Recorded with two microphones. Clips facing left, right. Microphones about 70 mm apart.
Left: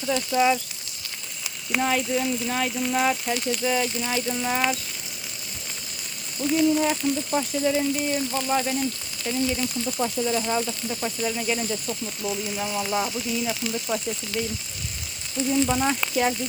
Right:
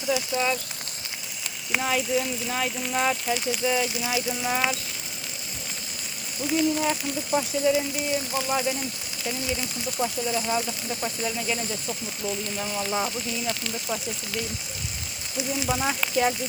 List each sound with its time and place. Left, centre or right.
0.1 s speech: centre
0.3 s speech: centre
1.5 s speech: centre
6.4 s speech: centre
9.3 s speech: centre
10.0 s speech: centre